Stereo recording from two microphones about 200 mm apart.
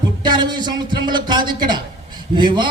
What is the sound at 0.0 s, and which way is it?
A man's voice, 20° right (ahead or behind).